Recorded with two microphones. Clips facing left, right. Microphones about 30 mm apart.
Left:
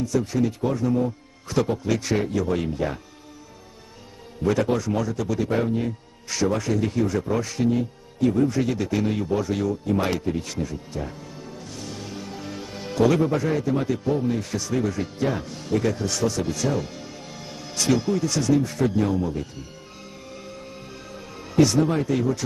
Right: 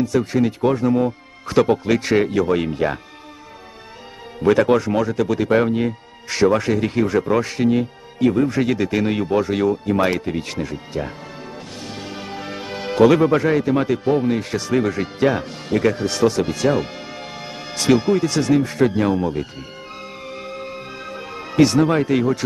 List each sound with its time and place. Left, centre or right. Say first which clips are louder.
0.0 s speech: right 5 dB; right
4.4 s a man's voice: right 7 dB; right
20.2 s music: right 8 dB; right